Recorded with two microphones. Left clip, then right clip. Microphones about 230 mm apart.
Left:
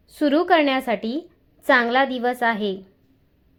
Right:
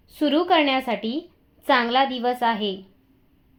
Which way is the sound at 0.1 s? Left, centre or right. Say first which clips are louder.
Left 2 dB; left.